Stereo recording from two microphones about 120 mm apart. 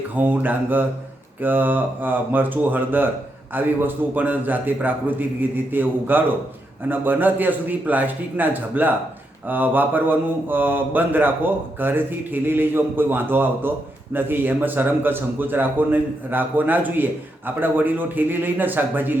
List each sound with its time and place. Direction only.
0.2 s mantra: 15° right (ahead or behind)